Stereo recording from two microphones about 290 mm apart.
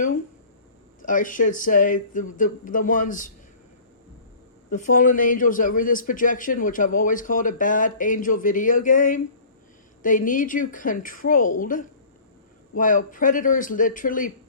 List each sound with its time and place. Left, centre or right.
1.0 s a man's voice: left
4.7 s a man's voice: left